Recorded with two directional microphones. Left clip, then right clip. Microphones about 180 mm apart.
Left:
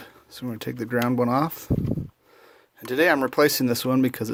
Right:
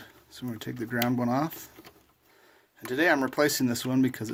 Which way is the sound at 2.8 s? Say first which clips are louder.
Left 4 dB; 40° left (ahead or behind).